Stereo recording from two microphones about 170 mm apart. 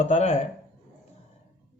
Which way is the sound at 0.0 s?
40° left (ahead or behind).